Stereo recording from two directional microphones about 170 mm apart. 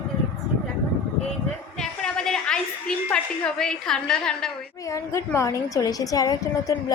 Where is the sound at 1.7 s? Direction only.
5° left (ahead or behind).